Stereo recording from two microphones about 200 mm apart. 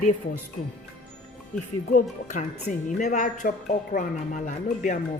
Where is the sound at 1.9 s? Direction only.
40° left (ahead or behind).